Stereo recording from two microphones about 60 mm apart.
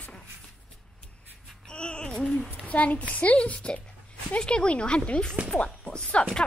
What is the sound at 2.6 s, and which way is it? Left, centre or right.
A woman's voice, left.